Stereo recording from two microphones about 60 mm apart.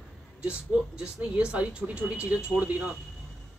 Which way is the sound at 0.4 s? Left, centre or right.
Centre.